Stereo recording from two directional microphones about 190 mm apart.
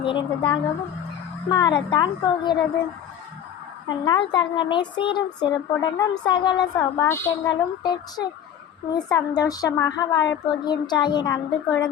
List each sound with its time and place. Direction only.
0.0 s speech: 25° left (ahead or behind)
3.8 s speech: 25° left (ahead or behind)